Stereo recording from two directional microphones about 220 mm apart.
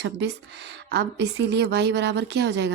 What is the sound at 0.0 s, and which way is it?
A woman's voice, 50° right (ahead or behind).